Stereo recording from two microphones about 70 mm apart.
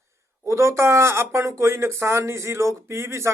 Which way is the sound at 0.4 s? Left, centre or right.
Right.